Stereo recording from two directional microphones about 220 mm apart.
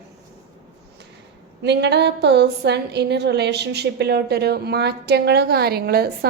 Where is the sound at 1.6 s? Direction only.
50° right (ahead or behind).